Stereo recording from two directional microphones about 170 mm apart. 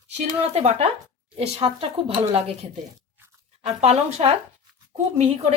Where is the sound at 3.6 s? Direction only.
40° right (ahead or behind).